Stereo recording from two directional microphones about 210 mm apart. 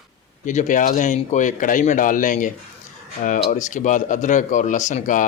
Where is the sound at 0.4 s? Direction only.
35° left (ahead or behind).